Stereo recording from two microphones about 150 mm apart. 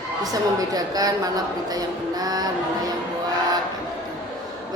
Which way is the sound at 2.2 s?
25° right (ahead or behind).